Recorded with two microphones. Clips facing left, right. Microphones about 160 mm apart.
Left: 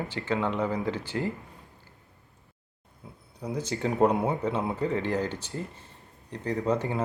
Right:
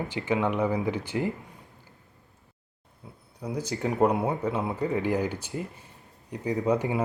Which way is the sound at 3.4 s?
10° right (ahead or behind).